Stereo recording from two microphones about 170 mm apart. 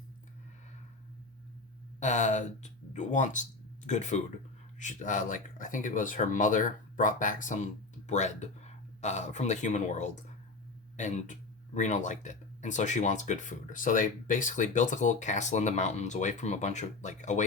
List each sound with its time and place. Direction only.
2.0 s speech: 45° left (ahead or behind)